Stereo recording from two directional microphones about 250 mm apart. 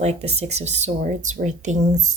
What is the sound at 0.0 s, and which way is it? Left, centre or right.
Speech, right.